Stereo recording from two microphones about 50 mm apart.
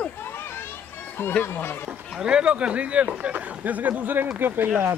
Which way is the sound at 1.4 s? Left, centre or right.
Left.